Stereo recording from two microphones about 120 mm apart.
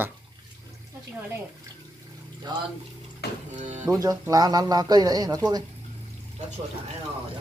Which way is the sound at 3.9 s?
30° right (ahead or behind).